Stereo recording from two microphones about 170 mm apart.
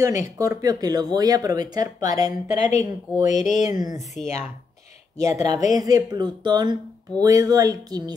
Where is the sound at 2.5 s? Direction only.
45° left (ahead or behind).